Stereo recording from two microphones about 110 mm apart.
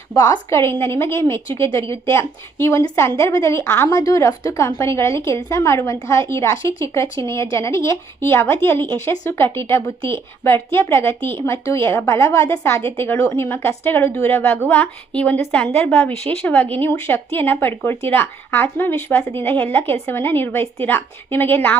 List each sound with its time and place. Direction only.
0.1 s a woman's voice: 30° left (ahead or behind)